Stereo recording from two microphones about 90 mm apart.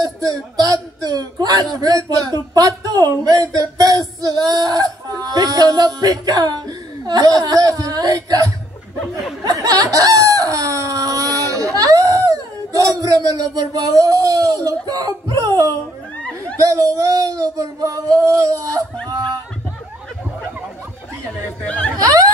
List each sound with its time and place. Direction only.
0.0 s speech: 45° right (ahead or behind)
9.4 s a sound: 45° right (ahead or behind)
16.2 s a sound: 15° left (ahead or behind)
16.5 s child singing: 40° right (ahead or behind)
21.6 s speech: 15° left (ahead or behind)
21.9 s snicker: 40° right (ahead or behind)